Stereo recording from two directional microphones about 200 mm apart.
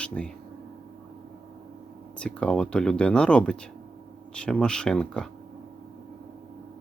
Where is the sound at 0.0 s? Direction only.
5° left (ahead or behind).